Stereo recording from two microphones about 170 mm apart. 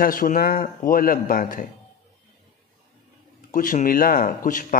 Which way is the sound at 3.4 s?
55° left (ahead or behind).